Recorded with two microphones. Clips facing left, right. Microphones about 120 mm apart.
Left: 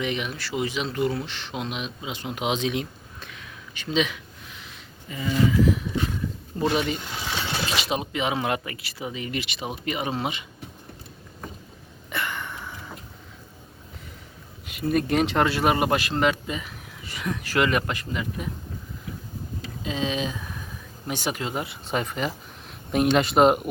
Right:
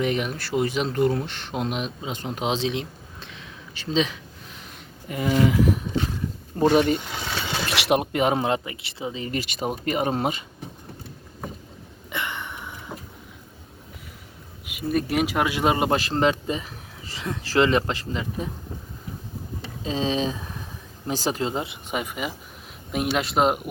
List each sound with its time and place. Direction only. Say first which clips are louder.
0.0 s speech: right 4 dB; 45° right (ahead or behind)
4.6 s a sound: right 3 dB; 55° right (ahead or behind)
6.7 s speech: right 6 dB; 45° right (ahead or behind)
7.7 s speech: right 5 dB; 60° right (ahead or behind)
8.4 s speech: right 2 dB; 25° right (ahead or behind); by 10.4 s 45° right (ahead or behind)
12.1 s a sound: even; 20° right (ahead or behind)
14.7 s speech: left 1 dB; 5° right (ahead or behind); by 16.0 s 25° right (ahead or behind)
16.0 s speech: right 2 dB; 35° right (ahead or behind)
19.8 s speech: right 3 dB; 35° right (ahead or behind)
21.9 s speech: left 2 dB; 10° right (ahead or behind)